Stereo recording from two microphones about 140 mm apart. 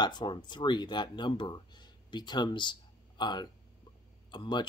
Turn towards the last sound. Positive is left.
turn(degrees=35)  # may be behind; listen again after turning